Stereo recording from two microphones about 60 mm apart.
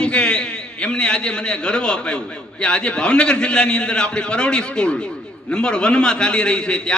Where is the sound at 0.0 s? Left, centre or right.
Centre.